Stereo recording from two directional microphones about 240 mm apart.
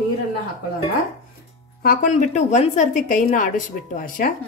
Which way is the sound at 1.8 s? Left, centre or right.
Left.